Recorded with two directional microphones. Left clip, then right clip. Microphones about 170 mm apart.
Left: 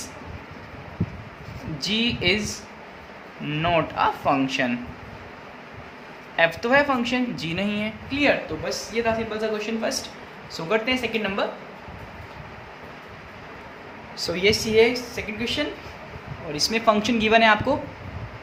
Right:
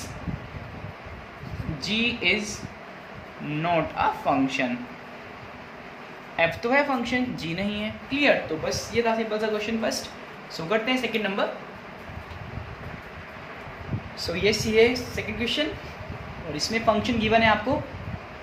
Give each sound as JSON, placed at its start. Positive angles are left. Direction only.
{"t": 1.8, "sound": "speech", "side_deg": 40}
{"t": 3.6, "sound": "speech", "side_deg": 40}
{"t": 6.3, "sound": "speech", "side_deg": 40}
{"t": 8.1, "sound": "a man's voice", "side_deg": 15}
{"t": 14.2, "sound": "speech", "side_deg": 25}
{"t": 16.5, "sound": "speech", "side_deg": 40}